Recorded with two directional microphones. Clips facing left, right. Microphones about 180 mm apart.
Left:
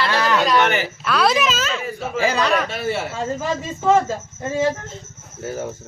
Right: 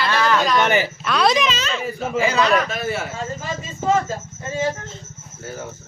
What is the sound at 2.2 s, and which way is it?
Speech, 35° left (ahead or behind).